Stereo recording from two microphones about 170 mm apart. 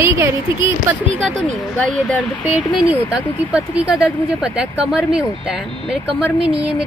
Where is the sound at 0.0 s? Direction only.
15° right (ahead or behind).